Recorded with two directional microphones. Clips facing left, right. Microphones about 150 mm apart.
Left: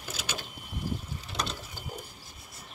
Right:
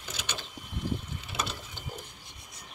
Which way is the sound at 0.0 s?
5° left (ahead or behind).